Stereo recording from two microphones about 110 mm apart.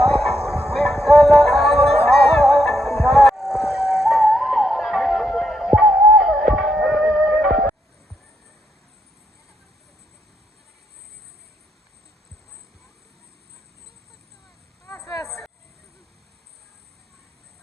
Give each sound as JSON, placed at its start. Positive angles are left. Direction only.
{"t": 0.1, "sound": "music", "side_deg": -65}
{"t": 1.0, "sound": "music", "side_deg": 0}
{"t": 1.7, "sound": "music", "side_deg": -65}
{"t": 2.4, "sound": "music", "side_deg": 0}
{"t": 3.1, "sound": "a sound", "side_deg": 0}
{"t": 15.2, "sound": "vehicle", "side_deg": 0}